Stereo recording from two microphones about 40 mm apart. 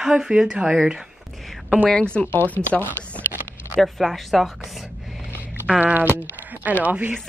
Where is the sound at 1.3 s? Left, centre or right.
Centre.